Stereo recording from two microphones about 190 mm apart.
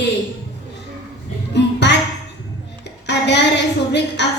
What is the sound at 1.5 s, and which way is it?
Child singing, 65° left (ahead or behind).